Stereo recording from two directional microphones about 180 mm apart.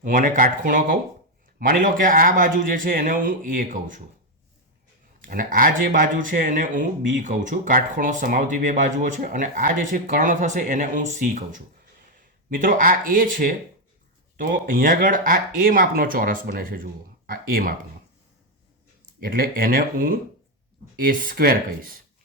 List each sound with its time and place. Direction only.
0.0 s speech: 50° right (ahead or behind)
5.2 s speech: 50° right (ahead or behind)
19.2 s speech: 55° right (ahead or behind)